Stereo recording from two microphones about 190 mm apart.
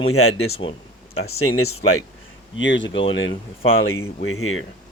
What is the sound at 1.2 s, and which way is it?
Speech, 90° left.